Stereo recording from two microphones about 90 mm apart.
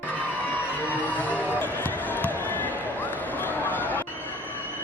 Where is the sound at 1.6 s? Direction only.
20° left (ahead or behind).